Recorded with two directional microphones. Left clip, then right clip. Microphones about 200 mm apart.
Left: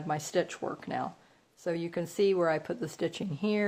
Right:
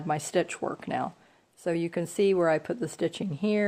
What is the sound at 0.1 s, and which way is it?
A woman's voice, 30° right (ahead or behind).